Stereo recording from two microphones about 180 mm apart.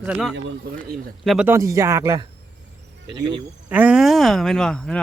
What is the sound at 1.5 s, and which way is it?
Speech, 15° right (ahead or behind).